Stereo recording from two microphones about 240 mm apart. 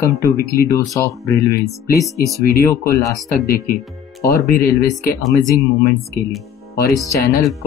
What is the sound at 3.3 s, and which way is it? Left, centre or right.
Speech, left.